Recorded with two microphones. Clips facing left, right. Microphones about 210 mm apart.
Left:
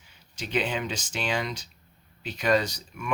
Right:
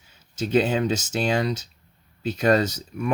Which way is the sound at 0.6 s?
40° right (ahead or behind).